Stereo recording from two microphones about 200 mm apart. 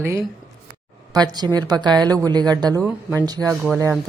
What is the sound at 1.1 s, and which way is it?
Speech, 20° right (ahead or behind).